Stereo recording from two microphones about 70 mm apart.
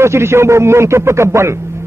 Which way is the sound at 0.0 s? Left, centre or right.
Right.